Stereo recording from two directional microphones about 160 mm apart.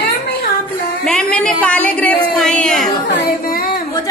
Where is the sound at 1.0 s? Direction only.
5° left (ahead or behind).